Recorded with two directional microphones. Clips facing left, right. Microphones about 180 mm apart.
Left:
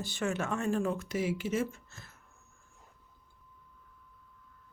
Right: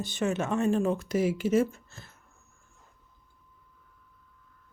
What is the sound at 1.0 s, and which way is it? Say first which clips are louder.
Speech: right 6 dB; 45° right (ahead or behind).